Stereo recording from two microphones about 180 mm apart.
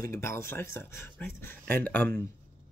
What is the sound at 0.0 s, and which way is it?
Speech, 15° left (ahead or behind).